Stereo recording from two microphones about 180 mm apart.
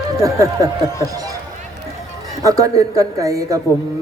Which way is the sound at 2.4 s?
20° right (ahead or behind).